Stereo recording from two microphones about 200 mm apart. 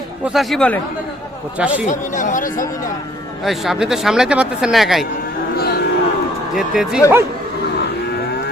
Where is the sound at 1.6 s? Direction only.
5° right (ahead or behind).